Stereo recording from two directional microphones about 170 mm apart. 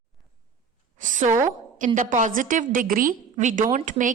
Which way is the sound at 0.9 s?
50° right (ahead or behind).